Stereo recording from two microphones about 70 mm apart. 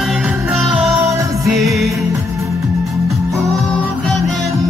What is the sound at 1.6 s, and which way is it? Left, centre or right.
Music, centre.